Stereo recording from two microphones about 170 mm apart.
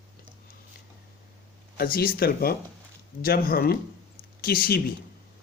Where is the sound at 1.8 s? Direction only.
60° left (ahead or behind).